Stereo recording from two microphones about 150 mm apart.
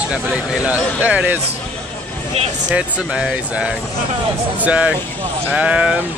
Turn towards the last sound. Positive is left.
turn(degrees=-10)  # may be behind; listen again after turning